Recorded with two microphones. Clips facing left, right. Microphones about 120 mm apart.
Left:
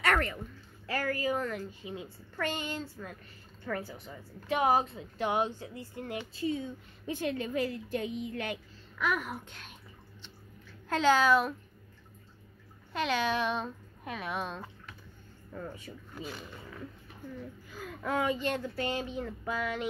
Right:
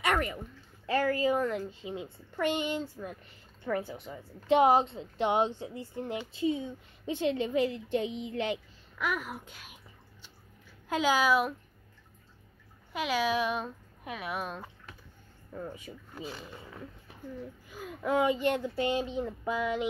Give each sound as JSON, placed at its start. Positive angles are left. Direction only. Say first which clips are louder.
{"t": 0.0, "sound": "a sound", "louder": "even", "side_deg": -15}
{"t": 0.8, "sound": "a woman's voice", "louder": "right 5 dB", "side_deg": -25}
{"t": 8.9, "sound": "speech", "louder": "left 1 dB", "side_deg": -5}
{"t": 10.9, "sound": "speech", "louder": "left 1 dB", "side_deg": -10}
{"t": 12.9, "sound": "speech", "louder": "right 1 dB", "side_deg": -5}
{"t": 16.2, "sound": "a woman's voice", "louder": "right 1 dB", "side_deg": -25}
{"t": 17.6, "sound": "speech", "louder": "right 4 dB", "side_deg": -15}